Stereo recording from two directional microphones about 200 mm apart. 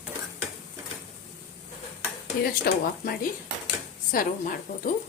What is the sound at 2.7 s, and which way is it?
Speech, 50° left (ahead or behind).